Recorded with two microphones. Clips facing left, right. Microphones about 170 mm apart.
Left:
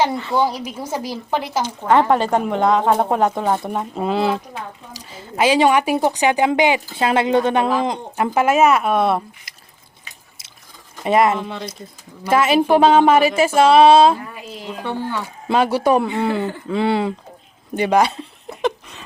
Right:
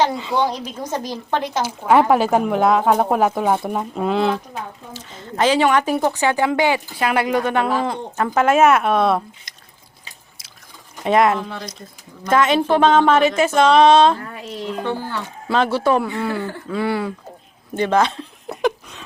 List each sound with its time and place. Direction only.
0.1 s a woman's voice: 15° right (ahead or behind)
0.3 s speech: 5° left (ahead or behind)
1.6 s speech: 10° right (ahead or behind)
11.0 s speech: centre (ahead or behind)
15.4 s speech: 15° left (ahead or behind)
18.6 s a sound: centre (ahead or behind)